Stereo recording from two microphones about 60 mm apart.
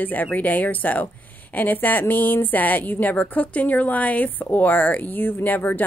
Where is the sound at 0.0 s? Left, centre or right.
Left.